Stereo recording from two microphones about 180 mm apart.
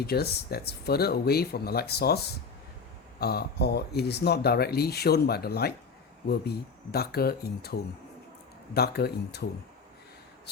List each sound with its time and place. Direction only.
0.0 s speech: 60° left (ahead or behind)